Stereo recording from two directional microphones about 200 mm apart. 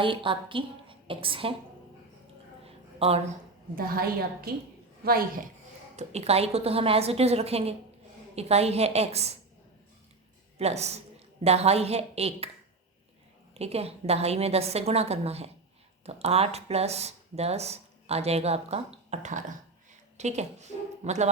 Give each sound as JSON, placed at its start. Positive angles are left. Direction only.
{"t": 0.0, "sound": "a woman's voice", "side_deg": -25}
{"t": 2.6, "sound": "a sound", "side_deg": -30}
{"t": 3.8, "sound": "a woman's voice", "side_deg": -50}
{"t": 6.0, "sound": "speech", "side_deg": -30}
{"t": 10.6, "sound": "speech", "side_deg": -30}
{"t": 13.5, "sound": "speech", "side_deg": -30}